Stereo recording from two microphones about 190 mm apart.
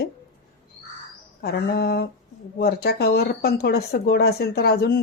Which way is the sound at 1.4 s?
60° left (ahead or behind).